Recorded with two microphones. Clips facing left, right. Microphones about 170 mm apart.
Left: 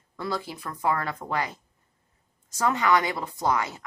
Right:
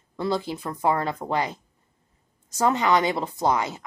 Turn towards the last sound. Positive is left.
turn(degrees=-20)  # may be behind; listen again after turning